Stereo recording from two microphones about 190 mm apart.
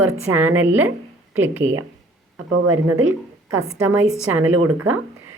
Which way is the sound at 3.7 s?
10° right (ahead or behind).